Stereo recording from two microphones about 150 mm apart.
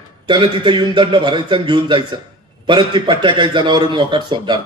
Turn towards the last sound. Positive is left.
turn(degrees=-30)  # may be behind; listen again after turning